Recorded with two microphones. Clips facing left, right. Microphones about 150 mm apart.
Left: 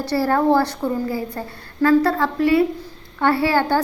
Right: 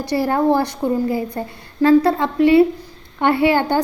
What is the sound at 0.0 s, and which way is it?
A woman's voice, 15° right (ahead or behind).